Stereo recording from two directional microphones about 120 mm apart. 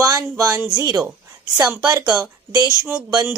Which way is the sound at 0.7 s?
35° right (ahead or behind).